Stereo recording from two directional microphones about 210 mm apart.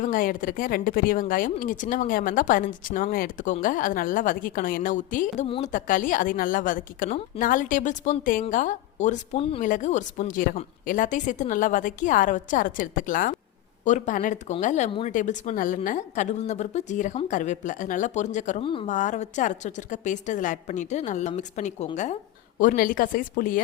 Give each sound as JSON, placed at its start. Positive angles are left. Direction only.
{"t": 0.0, "sound": "a woman's voice", "side_deg": 40}
{"t": 18.6, "sound": "speech", "side_deg": 25}
{"t": 18.9, "sound": "a woman's voice", "side_deg": 35}